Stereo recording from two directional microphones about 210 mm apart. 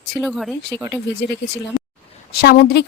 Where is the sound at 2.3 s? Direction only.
45° left (ahead or behind).